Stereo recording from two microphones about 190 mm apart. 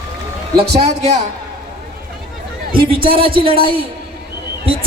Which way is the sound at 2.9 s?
30° right (ahead or behind).